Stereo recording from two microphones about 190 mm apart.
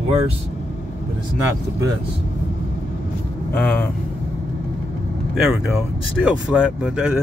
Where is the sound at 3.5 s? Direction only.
5° left (ahead or behind).